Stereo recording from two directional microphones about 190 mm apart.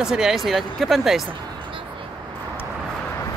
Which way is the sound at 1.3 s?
25° right (ahead or behind).